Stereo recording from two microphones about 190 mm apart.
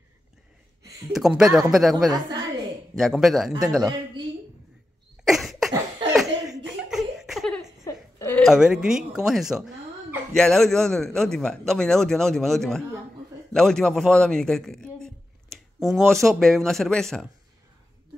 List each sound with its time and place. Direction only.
1.1 s a man's voice: centre (ahead or behind)
5.2 s cough: centre (ahead or behind)
6.1 s laughter: centre (ahead or behind)
7.8 s a sound: 15° left (ahead or behind)
8.5 s a man's voice: 5° right (ahead or behind)